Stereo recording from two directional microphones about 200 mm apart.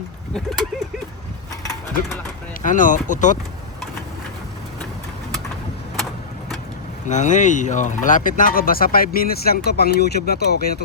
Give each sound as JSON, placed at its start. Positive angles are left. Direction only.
{"t": 2.6, "sound": "speech", "side_deg": 40}
{"t": 7.1, "sound": "speech", "side_deg": 35}